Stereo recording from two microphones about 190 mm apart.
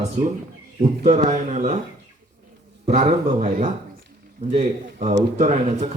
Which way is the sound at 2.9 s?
35° right (ahead or behind).